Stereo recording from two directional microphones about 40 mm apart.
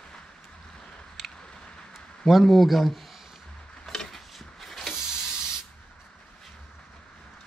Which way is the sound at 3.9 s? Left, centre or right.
Centre.